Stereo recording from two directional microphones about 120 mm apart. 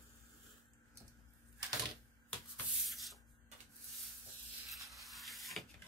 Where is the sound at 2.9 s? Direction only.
Centre (ahead or behind).